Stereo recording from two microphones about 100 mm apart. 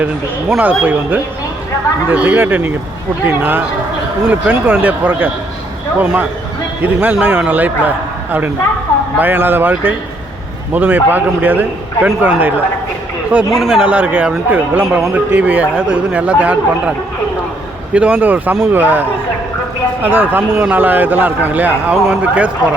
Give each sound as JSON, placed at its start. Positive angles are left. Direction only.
{"t": 0.0, "sound": "a man's voice", "side_deg": -10}
{"t": 13.5, "sound": "a man's voice", "side_deg": -5}
{"t": 17.9, "sound": "a man's voice", "side_deg": -15}